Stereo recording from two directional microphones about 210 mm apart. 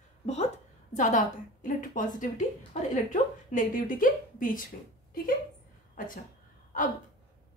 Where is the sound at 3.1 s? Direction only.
40° left (ahead or behind).